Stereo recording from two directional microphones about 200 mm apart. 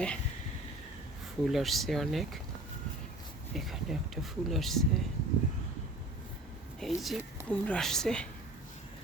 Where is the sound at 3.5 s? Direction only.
Centre (ahead or behind).